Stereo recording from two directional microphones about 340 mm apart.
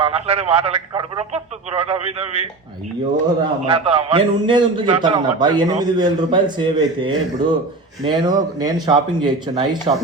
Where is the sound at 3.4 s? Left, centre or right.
Centre.